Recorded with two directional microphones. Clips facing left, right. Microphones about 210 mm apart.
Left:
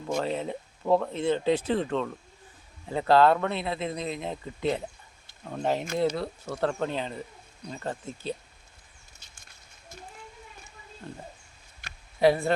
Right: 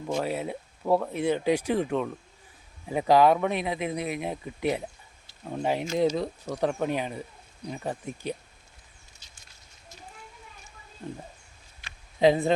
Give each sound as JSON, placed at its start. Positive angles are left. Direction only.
{"t": 0.2, "sound": "speech", "side_deg": -10}
{"t": 12.2, "sound": "speech", "side_deg": -20}